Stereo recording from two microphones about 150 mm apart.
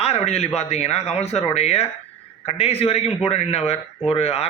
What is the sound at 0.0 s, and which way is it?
A man's voice, 45° left (ahead or behind).